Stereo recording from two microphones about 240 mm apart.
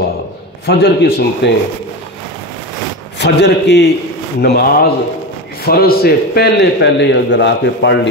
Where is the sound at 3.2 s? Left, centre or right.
Left.